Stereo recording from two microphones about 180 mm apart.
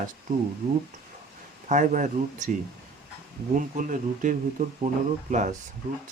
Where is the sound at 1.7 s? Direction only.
45° right (ahead or behind).